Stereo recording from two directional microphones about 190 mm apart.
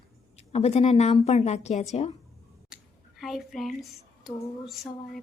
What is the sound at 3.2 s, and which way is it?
Speech, centre (ahead or behind).